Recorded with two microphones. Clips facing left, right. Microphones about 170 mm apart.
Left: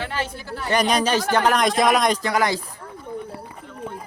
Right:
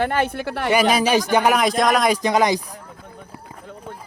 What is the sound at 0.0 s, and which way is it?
Speech, 55° right (ahead or behind).